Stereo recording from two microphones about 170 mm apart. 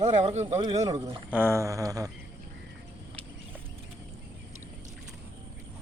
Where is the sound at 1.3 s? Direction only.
15° right (ahead or behind).